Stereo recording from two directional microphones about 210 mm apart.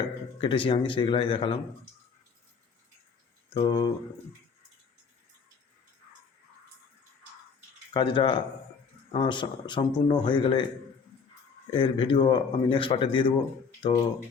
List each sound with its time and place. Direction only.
0.4 s a man's voice: 25° left (ahead or behind)
3.5 s a man's voice: 25° left (ahead or behind)
7.9 s a man's voice: 25° left (ahead or behind)
11.7 s a man's voice: 25° left (ahead or behind)